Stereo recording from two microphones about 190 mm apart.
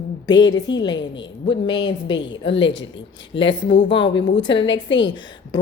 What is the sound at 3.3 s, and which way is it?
Speech, 25° left (ahead or behind).